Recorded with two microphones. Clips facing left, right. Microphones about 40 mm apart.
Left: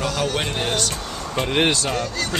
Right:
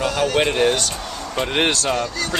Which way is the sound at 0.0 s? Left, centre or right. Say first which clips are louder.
Right 3 dB; centre.